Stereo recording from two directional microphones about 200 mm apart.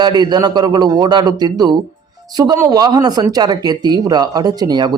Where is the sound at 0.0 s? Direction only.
20° right (ahead or behind).